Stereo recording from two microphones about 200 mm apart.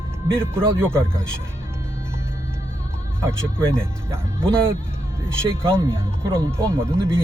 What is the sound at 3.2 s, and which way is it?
Speech, 15° right (ahead or behind).